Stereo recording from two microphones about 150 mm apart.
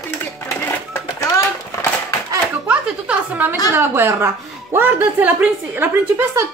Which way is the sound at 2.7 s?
10° right (ahead or behind).